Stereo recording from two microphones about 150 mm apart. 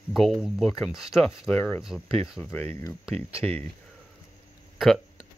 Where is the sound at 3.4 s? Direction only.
5° left (ahead or behind).